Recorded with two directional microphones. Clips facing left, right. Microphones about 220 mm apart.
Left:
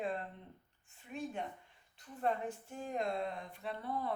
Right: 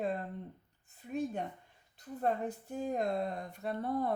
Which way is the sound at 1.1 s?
40° right (ahead or behind).